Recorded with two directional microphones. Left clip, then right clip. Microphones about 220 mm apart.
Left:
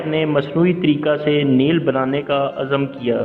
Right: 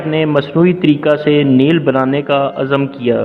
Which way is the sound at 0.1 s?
35° right (ahead or behind).